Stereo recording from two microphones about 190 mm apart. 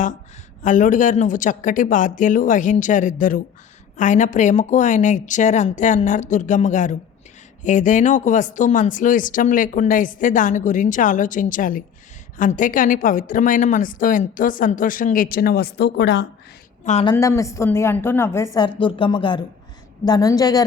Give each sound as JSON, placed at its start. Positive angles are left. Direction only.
{"t": 0.6, "sound": "a woman's voice", "side_deg": 40}
{"t": 16.8, "sound": "a woman's voice", "side_deg": 35}
{"t": 17.1, "sound": "a woman's voice", "side_deg": 15}